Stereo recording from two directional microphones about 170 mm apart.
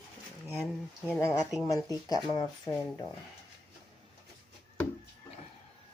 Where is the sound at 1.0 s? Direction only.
15° left (ahead or behind).